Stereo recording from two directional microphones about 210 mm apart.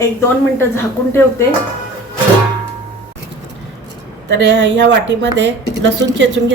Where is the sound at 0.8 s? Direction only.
10° left (ahead or behind).